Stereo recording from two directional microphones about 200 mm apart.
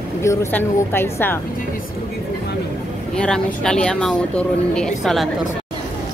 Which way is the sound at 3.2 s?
5° left (ahead or behind).